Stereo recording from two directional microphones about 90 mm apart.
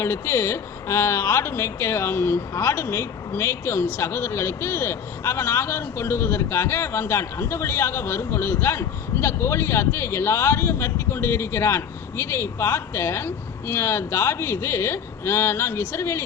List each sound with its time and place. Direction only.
0.0 s speech: 30° left (ahead or behind)